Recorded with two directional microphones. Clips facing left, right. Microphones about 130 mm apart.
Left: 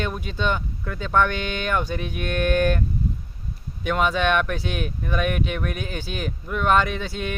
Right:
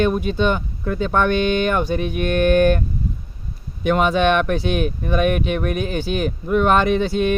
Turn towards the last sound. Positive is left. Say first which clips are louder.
# right 5 dB
turn(degrees=-20)  # may be behind; listen again after turning